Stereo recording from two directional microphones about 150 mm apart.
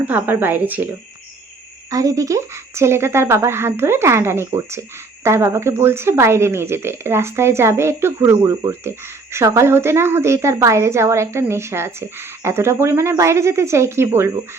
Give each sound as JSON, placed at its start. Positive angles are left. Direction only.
{"t": 0.0, "sound": "a woman's voice", "side_deg": -15}
{"t": 1.9, "sound": "a woman's voice", "side_deg": -25}